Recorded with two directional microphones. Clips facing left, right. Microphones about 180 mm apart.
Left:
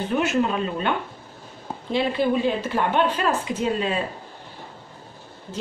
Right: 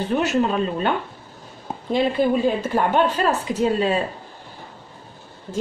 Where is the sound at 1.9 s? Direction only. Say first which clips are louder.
Right 3 dB; 45° right (ahead or behind).